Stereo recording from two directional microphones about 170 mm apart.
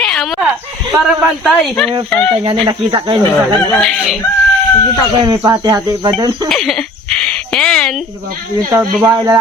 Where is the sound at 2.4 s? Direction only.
30° right (ahead or behind).